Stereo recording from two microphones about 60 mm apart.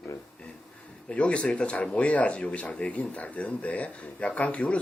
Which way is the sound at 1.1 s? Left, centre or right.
Left.